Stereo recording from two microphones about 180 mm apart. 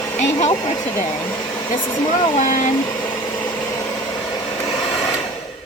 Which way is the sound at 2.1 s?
40° left (ahead or behind).